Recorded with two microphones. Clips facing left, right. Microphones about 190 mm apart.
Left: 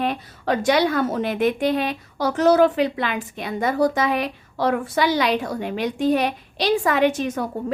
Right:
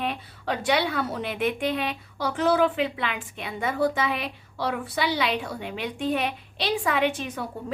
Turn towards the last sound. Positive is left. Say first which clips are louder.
# left 6 dB
turn(degrees=45)  # may be behind; listen again after turning